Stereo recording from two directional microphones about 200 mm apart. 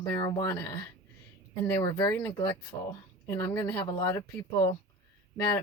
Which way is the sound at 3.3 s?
10° left (ahead or behind).